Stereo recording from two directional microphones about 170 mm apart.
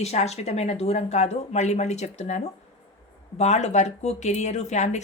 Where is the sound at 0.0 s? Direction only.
40° left (ahead or behind).